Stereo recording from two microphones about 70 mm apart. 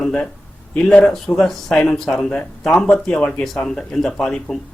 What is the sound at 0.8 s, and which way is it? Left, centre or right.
Speech, centre.